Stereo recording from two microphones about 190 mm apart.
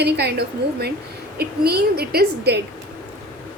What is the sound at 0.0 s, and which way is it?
A woman's voice, 60° right (ahead or behind).